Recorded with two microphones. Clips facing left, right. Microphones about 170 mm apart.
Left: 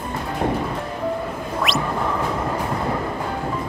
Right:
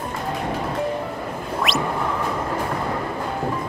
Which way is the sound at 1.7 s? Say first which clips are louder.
Even; centre (ahead or behind).